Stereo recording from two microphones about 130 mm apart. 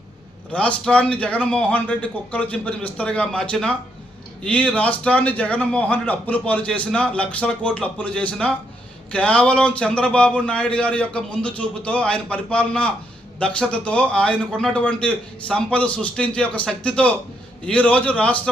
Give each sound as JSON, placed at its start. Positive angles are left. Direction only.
{"t": 0.9, "sound": "a man's voice", "side_deg": 10}